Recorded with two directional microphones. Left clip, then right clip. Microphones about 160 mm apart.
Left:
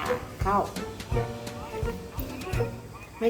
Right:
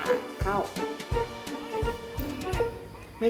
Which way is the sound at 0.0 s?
Centre (ahead or behind).